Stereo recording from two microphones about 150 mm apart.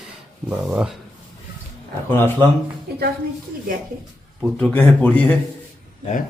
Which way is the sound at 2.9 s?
90° right.